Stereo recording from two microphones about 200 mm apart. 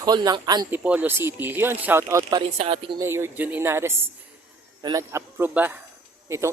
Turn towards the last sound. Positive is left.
turn(degrees=-15)  # may be behind; listen again after turning